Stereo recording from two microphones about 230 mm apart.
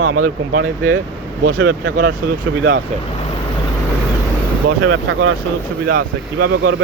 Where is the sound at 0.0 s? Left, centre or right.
Right.